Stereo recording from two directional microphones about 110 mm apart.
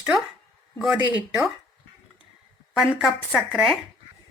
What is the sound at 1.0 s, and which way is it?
Speech, 15° right (ahead or behind).